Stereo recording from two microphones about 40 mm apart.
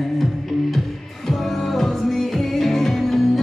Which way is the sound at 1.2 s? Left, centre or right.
Centre.